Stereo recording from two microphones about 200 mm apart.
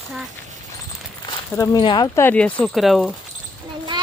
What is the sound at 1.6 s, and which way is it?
Speech, 20° left (ahead or behind).